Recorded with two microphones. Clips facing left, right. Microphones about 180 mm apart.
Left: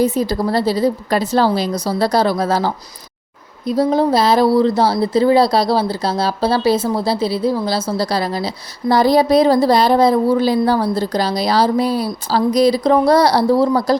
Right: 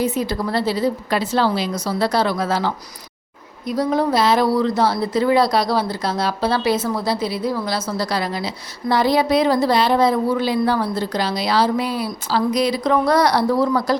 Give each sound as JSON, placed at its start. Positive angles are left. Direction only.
{"t": 0.0, "sound": "speech", "side_deg": 35}